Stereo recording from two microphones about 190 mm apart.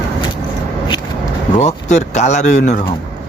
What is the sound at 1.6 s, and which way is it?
Speech, 35° left (ahead or behind).